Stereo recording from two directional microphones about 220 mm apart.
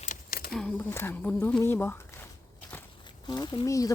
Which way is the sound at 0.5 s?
5° left (ahead or behind).